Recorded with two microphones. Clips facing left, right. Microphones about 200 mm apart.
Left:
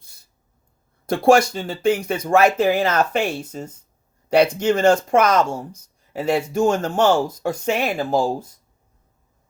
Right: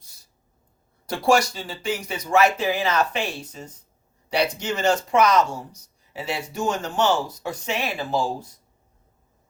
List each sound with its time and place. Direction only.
1.0 s speech: 55° left (ahead or behind)